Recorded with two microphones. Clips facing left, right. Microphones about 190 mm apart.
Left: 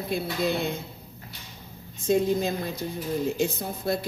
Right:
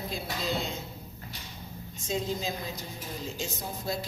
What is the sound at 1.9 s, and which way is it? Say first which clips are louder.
A woman's voice: left 9 dB; 55° left (ahead or behind).